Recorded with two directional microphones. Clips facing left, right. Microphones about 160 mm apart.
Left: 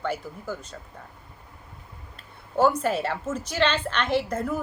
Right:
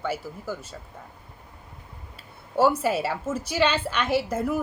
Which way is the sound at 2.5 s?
10° right (ahead or behind).